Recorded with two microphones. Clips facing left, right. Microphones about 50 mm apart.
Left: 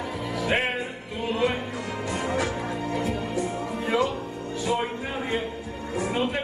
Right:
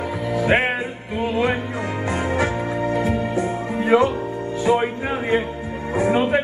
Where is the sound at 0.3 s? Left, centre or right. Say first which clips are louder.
Right 7 dB; right.